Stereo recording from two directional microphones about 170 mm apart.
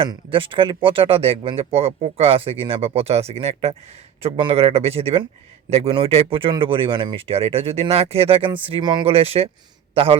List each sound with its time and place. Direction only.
0.0 s a man's voice: 30° right (ahead or behind)